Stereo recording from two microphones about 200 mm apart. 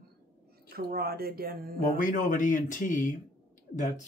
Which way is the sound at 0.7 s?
50° right (ahead or behind).